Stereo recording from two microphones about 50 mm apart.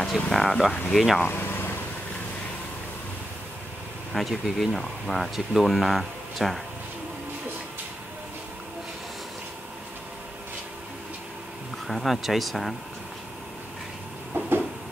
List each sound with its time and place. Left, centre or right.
0.0 s speech: centre
1.2 s vehicle: left
4.1 s speech: centre
11.9 s speech: centre
14.3 s a sound: right